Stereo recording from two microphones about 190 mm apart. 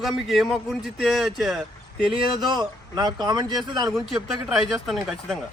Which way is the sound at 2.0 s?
25° right (ahead or behind).